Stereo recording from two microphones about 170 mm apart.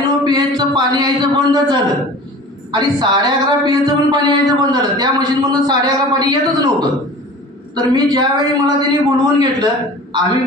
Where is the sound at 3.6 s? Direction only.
25° right (ahead or behind).